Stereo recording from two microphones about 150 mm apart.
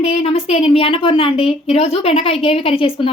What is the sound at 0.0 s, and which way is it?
Speech, 45° left (ahead or behind).